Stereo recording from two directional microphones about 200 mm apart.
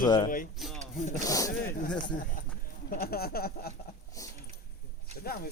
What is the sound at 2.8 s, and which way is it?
Speech, 50° left (ahead or behind).